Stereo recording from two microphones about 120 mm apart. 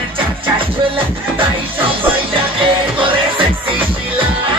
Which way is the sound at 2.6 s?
45° right (ahead or behind).